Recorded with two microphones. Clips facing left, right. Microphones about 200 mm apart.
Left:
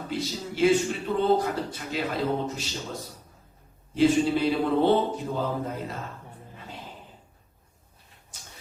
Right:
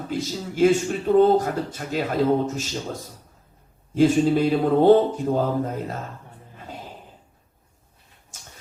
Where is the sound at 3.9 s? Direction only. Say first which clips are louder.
Right 4 dB; 45° right (ahead or behind).